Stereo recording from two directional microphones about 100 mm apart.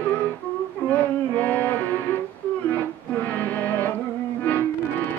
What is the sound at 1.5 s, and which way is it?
Music, 15° left (ahead or behind).